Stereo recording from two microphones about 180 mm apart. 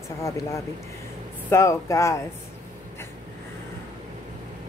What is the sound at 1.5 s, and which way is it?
Speech, 15° left (ahead or behind).